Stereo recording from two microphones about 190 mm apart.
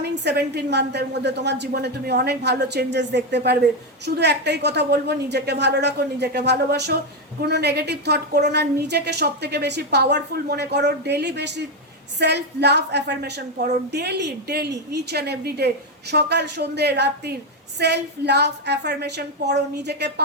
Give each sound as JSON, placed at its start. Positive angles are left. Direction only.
{"t": 0.0, "sound": "a woman's voice", "side_deg": -60}